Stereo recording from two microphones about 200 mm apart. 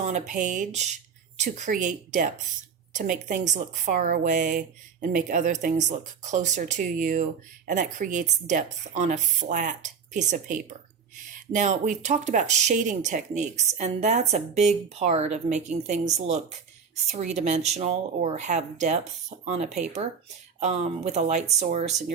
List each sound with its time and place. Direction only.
0.0 s speech: 35° right (ahead or behind)